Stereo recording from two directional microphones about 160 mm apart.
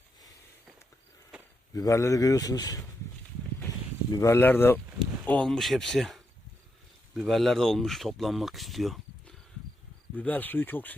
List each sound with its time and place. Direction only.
1.7 s a man's voice: 20° left (ahead or behind)
4.1 s speech: 20° left (ahead or behind)